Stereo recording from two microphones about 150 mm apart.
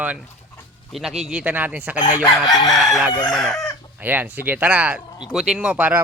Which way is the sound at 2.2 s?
25° left (ahead or behind).